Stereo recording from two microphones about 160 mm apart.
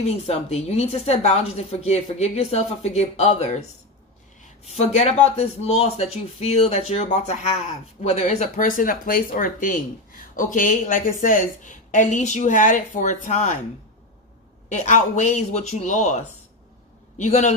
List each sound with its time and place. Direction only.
0.3 s a woman's voice: 40° left (ahead or behind)
4.6 s speech: 45° left (ahead or behind)
14.7 s speech: 50° left (ahead or behind)